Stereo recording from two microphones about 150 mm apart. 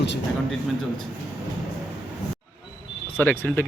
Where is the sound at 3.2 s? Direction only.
10° left (ahead or behind).